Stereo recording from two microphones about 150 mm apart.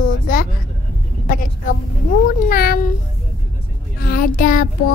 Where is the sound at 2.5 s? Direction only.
80° left.